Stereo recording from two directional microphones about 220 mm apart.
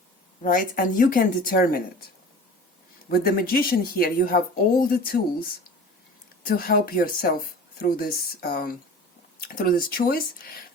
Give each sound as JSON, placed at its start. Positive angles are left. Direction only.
{"t": 0.4, "sound": "speech", "side_deg": 40}
{"t": 3.1, "sound": "speech", "side_deg": 45}